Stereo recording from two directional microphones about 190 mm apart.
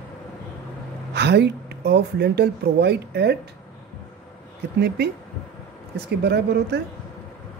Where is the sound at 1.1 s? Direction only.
60° right (ahead or behind).